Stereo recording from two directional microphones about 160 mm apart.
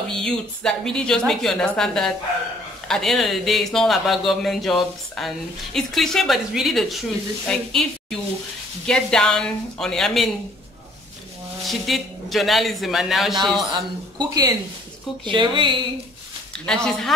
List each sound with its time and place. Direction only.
0.1 s speech: 5° left (ahead or behind)
11.6 s speech: centre (ahead or behind)
13.7 s speech: 25° right (ahead or behind)
16.6 s speech: 5° left (ahead or behind)